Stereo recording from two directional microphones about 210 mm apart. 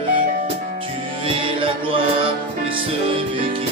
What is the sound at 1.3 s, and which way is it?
Music, 25° right (ahead or behind).